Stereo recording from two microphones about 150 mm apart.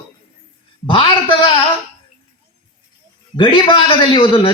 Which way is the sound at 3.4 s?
35° left (ahead or behind).